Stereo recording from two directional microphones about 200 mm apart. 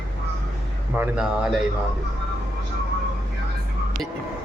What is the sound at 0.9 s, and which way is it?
Speech, 5° right (ahead or behind).